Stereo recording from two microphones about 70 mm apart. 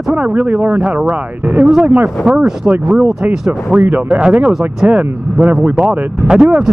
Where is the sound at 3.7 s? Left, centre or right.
Right.